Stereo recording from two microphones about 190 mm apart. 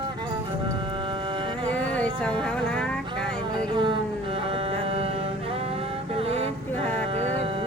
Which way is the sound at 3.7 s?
25° right (ahead or behind).